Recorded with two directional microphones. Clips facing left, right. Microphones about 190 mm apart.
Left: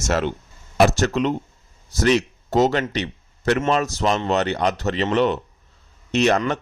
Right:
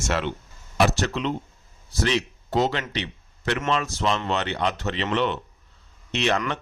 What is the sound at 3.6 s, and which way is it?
Speech, 40° left (ahead or behind).